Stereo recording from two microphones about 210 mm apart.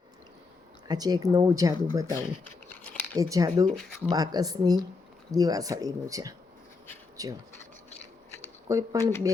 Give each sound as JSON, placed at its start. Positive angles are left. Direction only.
{"t": 0.9, "sound": "speech", "side_deg": -20}
{"t": 2.6, "sound": "a sound", "side_deg": 5}
{"t": 3.2, "sound": "speech", "side_deg": -15}
{"t": 3.8, "sound": "speech", "side_deg": 5}
{"t": 4.1, "sound": "speech", "side_deg": -15}
{"t": 7.9, "sound": "scissors", "side_deg": 30}
{"t": 8.6, "sound": "speech", "side_deg": -15}